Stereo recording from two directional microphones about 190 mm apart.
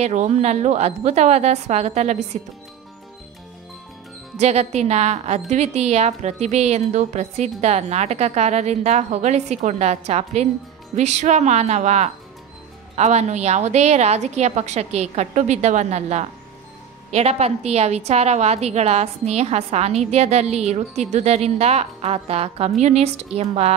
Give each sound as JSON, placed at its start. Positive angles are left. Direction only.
{"t": 0.0, "sound": "a woman's voice", "side_deg": -35}
{"t": 4.4, "sound": "a woman's voice", "side_deg": -35}